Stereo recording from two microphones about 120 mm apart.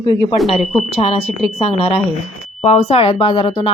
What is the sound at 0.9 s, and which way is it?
Speech, 55° left (ahead or behind).